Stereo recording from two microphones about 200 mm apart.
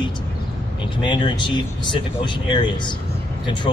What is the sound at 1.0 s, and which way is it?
Speech, 25° left (ahead or behind).